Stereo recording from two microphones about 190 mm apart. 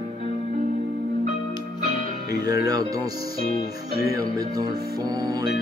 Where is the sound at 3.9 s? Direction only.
55° left (ahead or behind).